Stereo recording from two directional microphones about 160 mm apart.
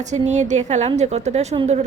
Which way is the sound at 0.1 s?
45° right (ahead or behind).